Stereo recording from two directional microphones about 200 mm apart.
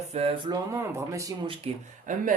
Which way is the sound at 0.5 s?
15° right (ahead or behind).